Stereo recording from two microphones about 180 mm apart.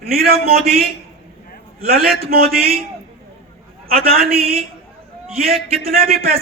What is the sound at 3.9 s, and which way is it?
Speech, 55° right (ahead or behind).